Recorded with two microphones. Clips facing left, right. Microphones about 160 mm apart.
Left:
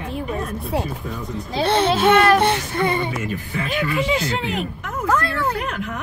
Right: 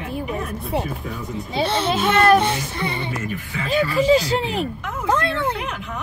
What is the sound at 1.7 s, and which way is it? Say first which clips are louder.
Speech: left 6 dB; 55° left (ahead or behind).